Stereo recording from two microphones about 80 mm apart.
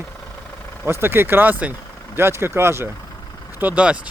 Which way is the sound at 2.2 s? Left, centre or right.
Right.